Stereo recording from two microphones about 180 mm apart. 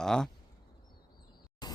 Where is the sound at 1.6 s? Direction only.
25° left (ahead or behind).